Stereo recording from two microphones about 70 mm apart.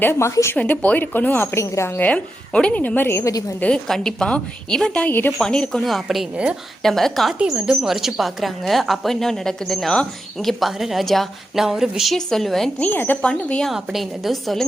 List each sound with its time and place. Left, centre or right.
0.0 s speech: left
0.5 s a woman's voice: left
2.0 s a woman's voice: centre; by 3.3 s left
3.8 s speech: centre
5.0 s a woman's voice: left
5.4 s speech: centre
5.8 s a woman's voice: centre
6.3 s speech: centre
6.8 s a woman's voice: centre
7.3 s a woman's voice: centre
12.1 s a woman's voice: centre
12.8 s a woman's voice: left
13.2 s speech: centre
13.7 s a woman's voice: centre